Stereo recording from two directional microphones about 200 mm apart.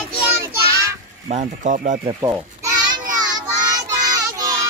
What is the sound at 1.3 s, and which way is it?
Speech, 40° right (ahead or behind).